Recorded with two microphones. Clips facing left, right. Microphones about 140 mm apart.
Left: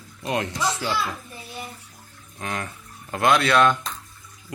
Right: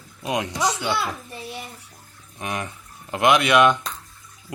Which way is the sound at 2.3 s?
15° right (ahead or behind).